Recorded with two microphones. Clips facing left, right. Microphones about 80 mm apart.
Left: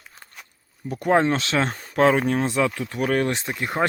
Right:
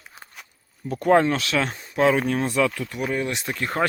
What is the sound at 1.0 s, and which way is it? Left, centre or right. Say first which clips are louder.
Speech: right 1 dB; centre.